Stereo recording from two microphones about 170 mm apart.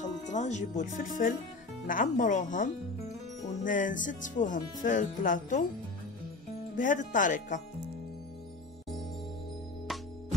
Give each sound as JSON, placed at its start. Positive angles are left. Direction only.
{"t": 0.0, "sound": "speech", "side_deg": 45}
{"t": 6.8, "sound": "speech", "side_deg": 50}